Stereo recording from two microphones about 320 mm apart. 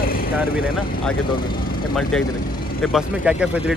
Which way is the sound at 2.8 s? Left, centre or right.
Centre.